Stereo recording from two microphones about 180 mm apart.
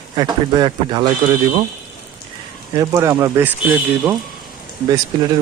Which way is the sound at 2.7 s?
20° right (ahead or behind).